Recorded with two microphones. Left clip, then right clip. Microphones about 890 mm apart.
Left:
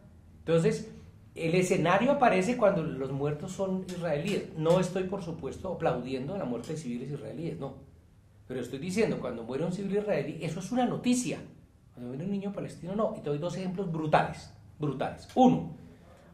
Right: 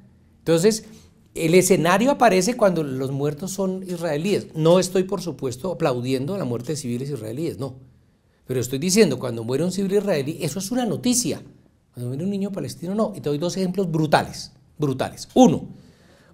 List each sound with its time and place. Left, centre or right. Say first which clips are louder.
0.5 s speech: right 8 dB; right